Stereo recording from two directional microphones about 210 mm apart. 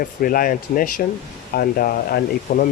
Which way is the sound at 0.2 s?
45° left (ahead or behind).